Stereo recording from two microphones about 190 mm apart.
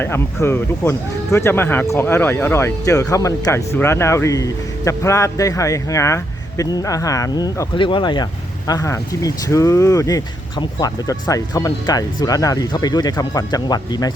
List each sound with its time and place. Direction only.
0.0 s speech: 10° left (ahead or behind)